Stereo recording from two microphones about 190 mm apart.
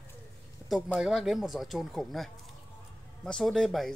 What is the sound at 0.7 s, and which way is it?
Speech, centre (ahead or behind).